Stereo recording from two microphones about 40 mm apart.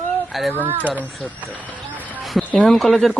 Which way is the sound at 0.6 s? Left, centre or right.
Right.